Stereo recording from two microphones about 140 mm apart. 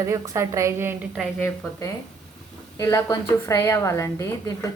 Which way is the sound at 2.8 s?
20° left (ahead or behind).